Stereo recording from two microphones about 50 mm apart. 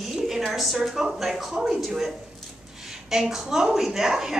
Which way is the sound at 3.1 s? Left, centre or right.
Centre.